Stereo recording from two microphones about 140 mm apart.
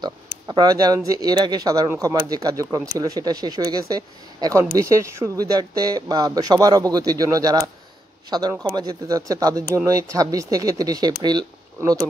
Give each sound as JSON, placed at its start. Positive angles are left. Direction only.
{"t": 0.5, "sound": "speech", "side_deg": -25}